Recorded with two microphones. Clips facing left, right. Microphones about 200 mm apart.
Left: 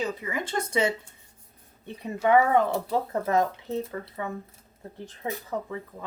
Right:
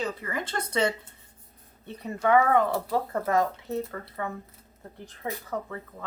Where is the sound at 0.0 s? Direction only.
10° left (ahead or behind).